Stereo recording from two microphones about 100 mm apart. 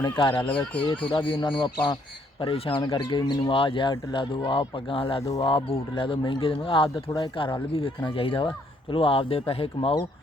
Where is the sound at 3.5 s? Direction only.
60° left (ahead or behind).